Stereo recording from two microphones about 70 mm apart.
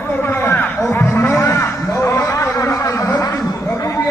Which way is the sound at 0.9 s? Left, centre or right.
Left.